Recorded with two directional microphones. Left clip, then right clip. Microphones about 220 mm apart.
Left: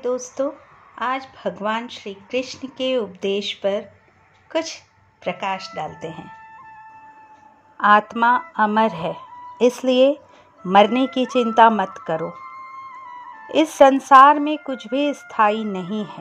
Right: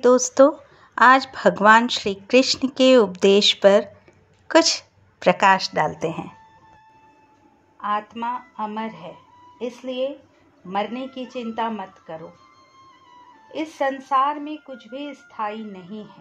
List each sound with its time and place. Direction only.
0.0 s a woman's voice: 25° right (ahead or behind)
7.7 s speech: 25° left (ahead or behind)
13.5 s speech: 30° left (ahead or behind)